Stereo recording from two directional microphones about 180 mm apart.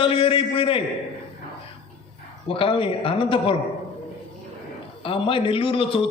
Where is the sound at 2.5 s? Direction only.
30° left (ahead or behind).